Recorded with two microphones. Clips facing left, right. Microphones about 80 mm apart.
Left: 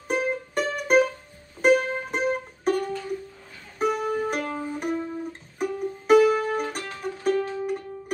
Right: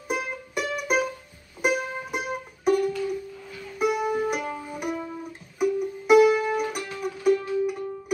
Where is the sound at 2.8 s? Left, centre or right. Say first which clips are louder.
Right 4 dB; left.